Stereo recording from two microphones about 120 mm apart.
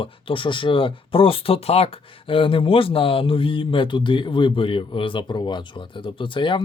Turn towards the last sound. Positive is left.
turn(degrees=45)  # may be behind; listen again after turning